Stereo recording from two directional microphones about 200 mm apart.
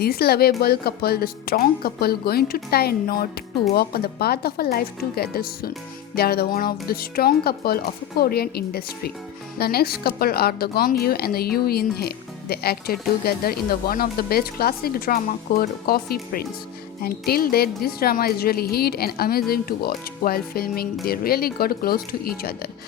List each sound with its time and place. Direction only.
0.0 s a woman's voice: 50° left (ahead or behind)